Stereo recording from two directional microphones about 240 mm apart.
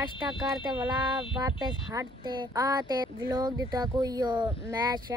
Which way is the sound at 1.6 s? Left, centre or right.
Centre.